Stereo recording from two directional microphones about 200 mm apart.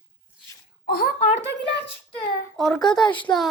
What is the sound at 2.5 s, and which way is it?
Speech, centre (ahead or behind).